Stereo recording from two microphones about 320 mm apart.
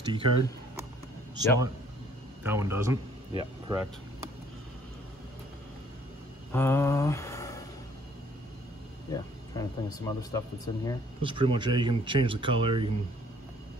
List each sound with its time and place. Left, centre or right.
0.0 s speech: centre
2.4 s speech: centre
6.5 s a sound: centre
9.1 s speech: centre
11.2 s speech: centre